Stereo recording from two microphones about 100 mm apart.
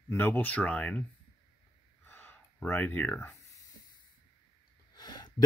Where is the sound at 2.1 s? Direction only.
20° left (ahead or behind).